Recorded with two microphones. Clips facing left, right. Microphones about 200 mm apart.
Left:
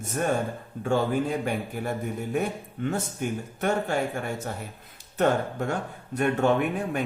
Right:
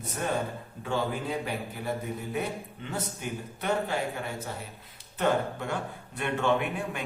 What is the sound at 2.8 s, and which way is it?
Speech, 50° left (ahead or behind).